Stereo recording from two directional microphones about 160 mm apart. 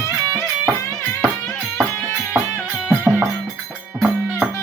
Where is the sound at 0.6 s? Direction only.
10° left (ahead or behind).